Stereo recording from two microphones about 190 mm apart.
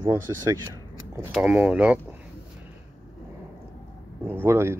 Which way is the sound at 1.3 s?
5° right (ahead or behind).